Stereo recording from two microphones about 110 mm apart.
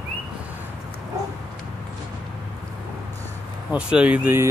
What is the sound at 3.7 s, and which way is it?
Speech, 10° right (ahead or behind).